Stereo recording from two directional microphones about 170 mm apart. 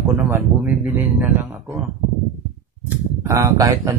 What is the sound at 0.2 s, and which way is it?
Speech, 10° right (ahead or behind).